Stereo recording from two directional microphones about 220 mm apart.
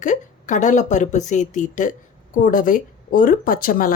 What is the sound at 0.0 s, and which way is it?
A woman's voice, 35° left (ahead or behind).